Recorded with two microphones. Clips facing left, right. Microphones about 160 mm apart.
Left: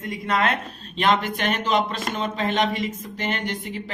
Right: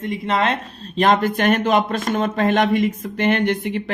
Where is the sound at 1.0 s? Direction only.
45° right (ahead or behind); by 3.9 s 65° right (ahead or behind).